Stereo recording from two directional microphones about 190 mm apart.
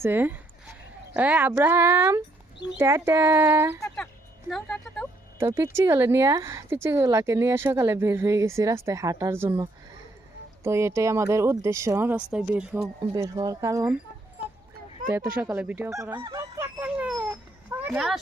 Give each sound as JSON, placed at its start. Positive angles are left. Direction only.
{"t": 0.0, "sound": "speech", "side_deg": -10}
{"t": 3.8, "sound": "music", "side_deg": 5}
{"t": 5.4, "sound": "speech", "side_deg": -15}
{"t": 13.0, "sound": "speech", "side_deg": -20}
{"t": 15.1, "sound": "speech", "side_deg": -10}
{"t": 16.2, "sound": "honk", "side_deg": -15}